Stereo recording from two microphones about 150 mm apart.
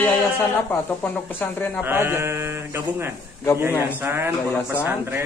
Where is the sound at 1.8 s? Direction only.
15° right (ahead or behind).